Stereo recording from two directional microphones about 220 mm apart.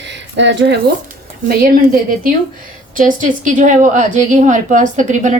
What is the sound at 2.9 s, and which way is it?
A woman's voice, 35° right (ahead or behind).